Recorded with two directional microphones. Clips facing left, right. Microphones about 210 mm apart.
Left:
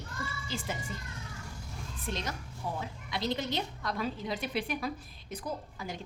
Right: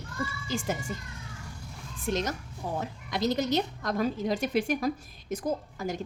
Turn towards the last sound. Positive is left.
turn(degrees=-45)  # may be behind; listen again after turning